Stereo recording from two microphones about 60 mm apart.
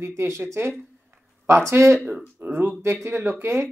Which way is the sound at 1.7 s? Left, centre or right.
Right.